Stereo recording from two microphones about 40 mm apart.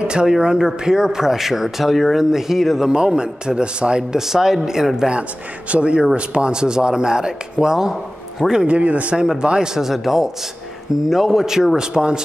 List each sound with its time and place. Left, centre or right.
0.0 s speech: right; by 2.9 s centre
2.9 s speech: right
4.2 s speech: centre
5.7 s speech: right
8.6 s a man's voice: right
9.4 s speech: right
9.8 s speech: centre